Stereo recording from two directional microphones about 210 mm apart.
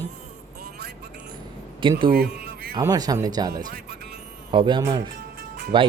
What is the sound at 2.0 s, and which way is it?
Music, 45° right (ahead or behind).